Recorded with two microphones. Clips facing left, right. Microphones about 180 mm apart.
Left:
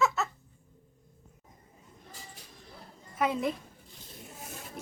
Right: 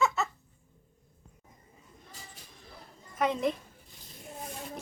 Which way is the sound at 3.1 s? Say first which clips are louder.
Right 1 dB; 5° left (ahead or behind).